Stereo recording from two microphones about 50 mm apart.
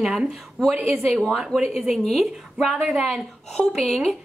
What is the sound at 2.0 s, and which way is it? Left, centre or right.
Speech, centre.